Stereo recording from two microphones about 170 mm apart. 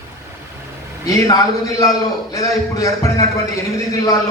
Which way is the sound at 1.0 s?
20° left (ahead or behind).